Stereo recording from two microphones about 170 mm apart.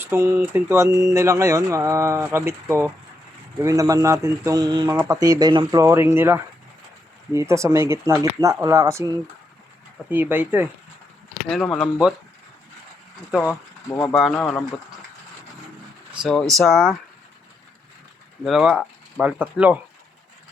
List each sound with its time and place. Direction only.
0.0 s speech: 15° right (ahead or behind)
10.1 s speech: 10° right (ahead or behind)
11.4 s speech: 5° left (ahead or behind)
13.5 s speech: 15° left (ahead or behind)
14.1 s speech: 5° left (ahead or behind)
16.6 s speech: centre (ahead or behind)
18.4 s speech: 5° right (ahead or behind)